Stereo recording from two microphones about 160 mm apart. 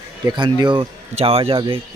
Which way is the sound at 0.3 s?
30° right (ahead or behind).